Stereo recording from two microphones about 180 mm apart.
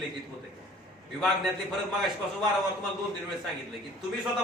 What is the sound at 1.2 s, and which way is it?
Speech, centre (ahead or behind).